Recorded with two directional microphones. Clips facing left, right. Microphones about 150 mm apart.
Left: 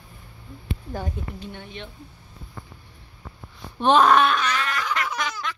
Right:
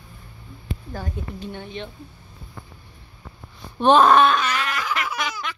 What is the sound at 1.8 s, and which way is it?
Wail, 30° right (ahead or behind).